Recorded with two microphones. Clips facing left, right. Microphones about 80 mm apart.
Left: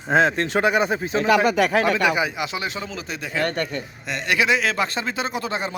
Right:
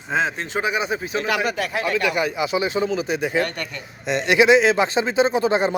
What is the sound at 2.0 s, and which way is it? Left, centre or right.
Speech, centre.